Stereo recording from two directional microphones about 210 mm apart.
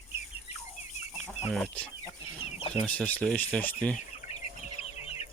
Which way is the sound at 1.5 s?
5° left (ahead or behind).